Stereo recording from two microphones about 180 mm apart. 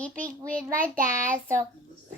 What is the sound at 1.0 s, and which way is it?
Speech, 45° right (ahead or behind).